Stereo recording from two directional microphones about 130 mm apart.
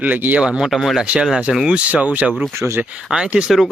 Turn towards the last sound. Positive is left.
turn(degrees=-5)  # may be behind; listen again after turning